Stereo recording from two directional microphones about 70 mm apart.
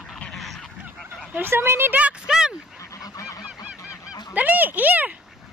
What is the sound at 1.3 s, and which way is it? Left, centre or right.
Speech, right.